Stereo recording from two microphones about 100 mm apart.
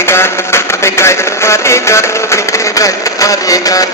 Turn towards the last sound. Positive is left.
turn(degrees=35)  # may be behind; listen again after turning